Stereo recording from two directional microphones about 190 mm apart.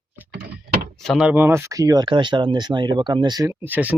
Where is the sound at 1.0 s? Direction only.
Centre (ahead or behind).